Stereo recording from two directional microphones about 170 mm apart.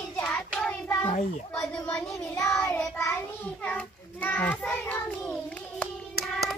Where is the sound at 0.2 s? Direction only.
5° left (ahead or behind).